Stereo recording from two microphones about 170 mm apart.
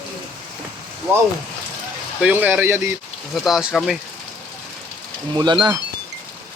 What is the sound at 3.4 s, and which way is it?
Speech, centre (ahead or behind).